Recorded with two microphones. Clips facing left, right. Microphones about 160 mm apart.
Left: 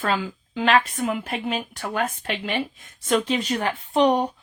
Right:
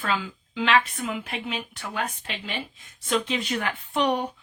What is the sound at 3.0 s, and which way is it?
Speech, 40° left (ahead or behind).